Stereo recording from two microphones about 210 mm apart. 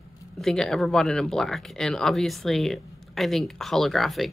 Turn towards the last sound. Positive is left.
turn(degrees=0)  # may be behind; listen again after turning